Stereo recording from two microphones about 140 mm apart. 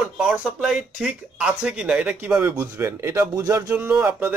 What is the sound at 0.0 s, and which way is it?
Speech, 5° right (ahead or behind).